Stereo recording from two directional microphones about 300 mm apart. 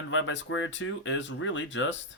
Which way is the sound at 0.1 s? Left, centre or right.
Left.